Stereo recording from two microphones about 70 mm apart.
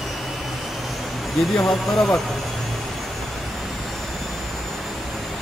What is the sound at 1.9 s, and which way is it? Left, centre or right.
Speech, centre.